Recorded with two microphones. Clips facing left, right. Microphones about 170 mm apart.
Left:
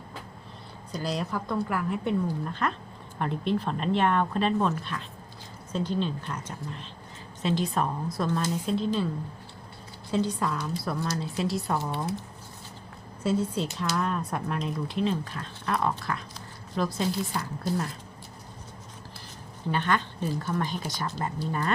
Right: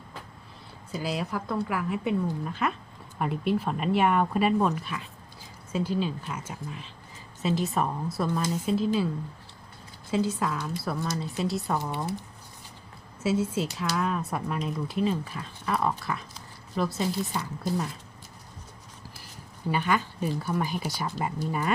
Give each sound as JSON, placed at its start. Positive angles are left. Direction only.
{"t": 0.9, "sound": "speech", "side_deg": -5}
{"t": 10.1, "sound": "speech", "side_deg": -5}
{"t": 13.2, "sound": "speech", "side_deg": -5}
{"t": 19.7, "sound": "speech", "side_deg": -10}